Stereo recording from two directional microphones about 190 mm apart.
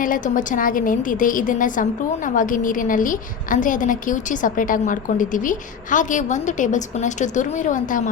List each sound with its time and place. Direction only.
0.0 s a woman's voice: 45° left (ahead or behind)